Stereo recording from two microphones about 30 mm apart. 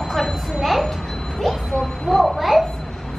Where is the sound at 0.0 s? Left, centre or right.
Centre.